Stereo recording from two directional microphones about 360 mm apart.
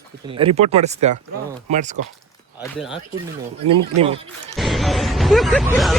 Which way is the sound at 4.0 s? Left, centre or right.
Centre.